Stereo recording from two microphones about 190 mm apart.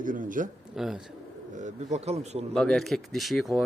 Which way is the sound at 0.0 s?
45° right (ahead or behind).